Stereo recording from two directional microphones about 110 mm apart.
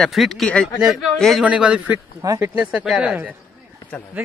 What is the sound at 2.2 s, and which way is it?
Speech, 30° right (ahead or behind).